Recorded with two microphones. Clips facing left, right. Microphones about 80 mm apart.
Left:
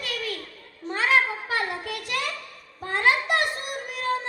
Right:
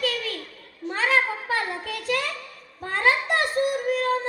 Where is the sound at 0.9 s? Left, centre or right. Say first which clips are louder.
Even; right.